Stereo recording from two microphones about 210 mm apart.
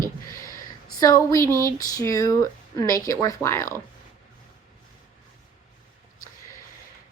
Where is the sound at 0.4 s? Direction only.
15° left (ahead or behind).